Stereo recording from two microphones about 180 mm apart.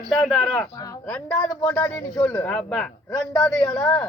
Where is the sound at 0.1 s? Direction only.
Centre (ahead or behind).